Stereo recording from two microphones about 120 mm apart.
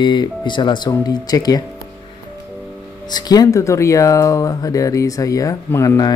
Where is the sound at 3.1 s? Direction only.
35° left (ahead or behind).